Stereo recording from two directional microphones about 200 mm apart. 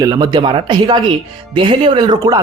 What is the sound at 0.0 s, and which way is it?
Speech, 20° right (ahead or behind).